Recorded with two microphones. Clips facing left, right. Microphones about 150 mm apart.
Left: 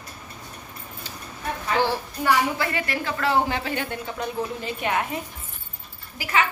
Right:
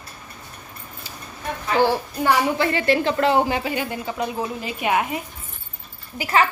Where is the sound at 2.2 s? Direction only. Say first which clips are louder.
Right 2 dB; 25° right (ahead or behind).